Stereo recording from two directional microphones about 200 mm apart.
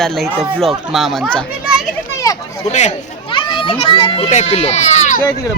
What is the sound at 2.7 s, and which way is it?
Speech, 35° left (ahead or behind).